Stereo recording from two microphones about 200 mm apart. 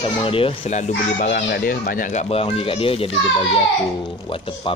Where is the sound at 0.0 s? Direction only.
25° left (ahead or behind).